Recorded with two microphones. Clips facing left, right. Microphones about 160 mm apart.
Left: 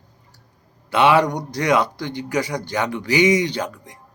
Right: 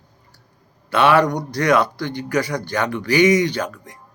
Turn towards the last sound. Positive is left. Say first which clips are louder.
# right 1 dB
turn(degrees=20)  # may be behind; listen again after turning